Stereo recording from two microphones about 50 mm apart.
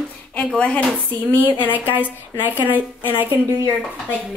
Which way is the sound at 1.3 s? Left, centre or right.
Left.